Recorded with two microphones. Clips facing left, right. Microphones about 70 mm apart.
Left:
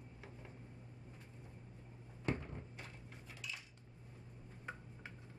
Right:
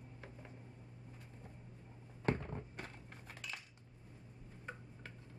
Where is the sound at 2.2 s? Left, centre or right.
Right.